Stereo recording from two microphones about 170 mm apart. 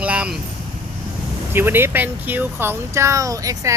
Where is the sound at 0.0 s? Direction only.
5° right (ahead or behind).